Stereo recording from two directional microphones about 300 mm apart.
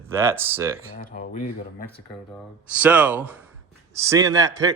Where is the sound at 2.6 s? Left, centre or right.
Centre.